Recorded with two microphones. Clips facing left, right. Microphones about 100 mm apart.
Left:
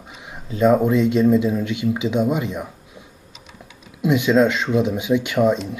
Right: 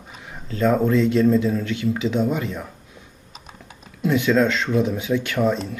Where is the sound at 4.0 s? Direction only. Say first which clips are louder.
Left 2 dB; 15° left (ahead or behind).